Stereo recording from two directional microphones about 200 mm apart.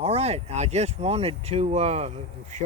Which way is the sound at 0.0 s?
30° right (ahead or behind).